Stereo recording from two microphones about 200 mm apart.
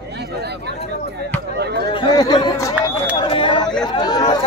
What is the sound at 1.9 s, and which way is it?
Speech, 20° left (ahead or behind).